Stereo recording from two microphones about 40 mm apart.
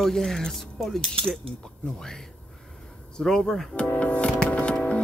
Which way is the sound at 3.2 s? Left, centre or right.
Centre.